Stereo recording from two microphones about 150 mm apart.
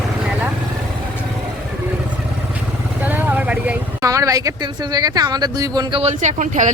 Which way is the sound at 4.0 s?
20° right (ahead or behind).